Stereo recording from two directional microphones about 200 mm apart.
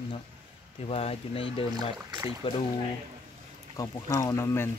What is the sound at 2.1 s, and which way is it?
Speech, 20° right (ahead or behind).